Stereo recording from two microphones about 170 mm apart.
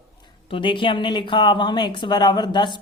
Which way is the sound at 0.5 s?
30° left (ahead or behind).